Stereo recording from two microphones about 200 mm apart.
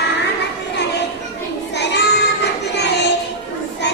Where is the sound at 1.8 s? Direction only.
60° left (ahead or behind).